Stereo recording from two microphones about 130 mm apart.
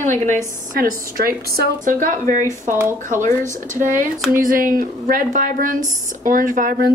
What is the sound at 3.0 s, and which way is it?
A woman's voice, 75° right (ahead or behind).